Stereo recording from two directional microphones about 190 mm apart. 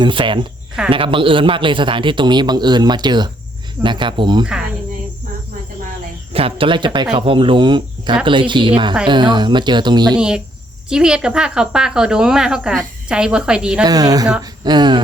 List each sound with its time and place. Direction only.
0.0 s speech: 25° right (ahead or behind)
6.3 s speech: 30° right (ahead or behind)
10.2 s a woman's voice: 5° right (ahead or behind)
13.8 s speech: 20° right (ahead or behind)